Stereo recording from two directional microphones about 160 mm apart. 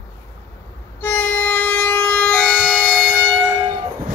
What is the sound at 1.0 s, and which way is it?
Music, 10° left (ahead or behind).